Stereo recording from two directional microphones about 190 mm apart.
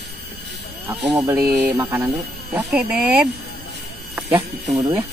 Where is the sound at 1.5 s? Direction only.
10° right (ahead or behind).